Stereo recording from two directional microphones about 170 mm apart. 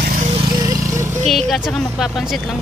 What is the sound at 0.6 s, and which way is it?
Vehicle, 20° right (ahead or behind).